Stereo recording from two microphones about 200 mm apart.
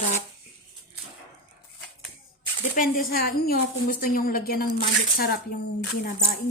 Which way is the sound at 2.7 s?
45° left (ahead or behind).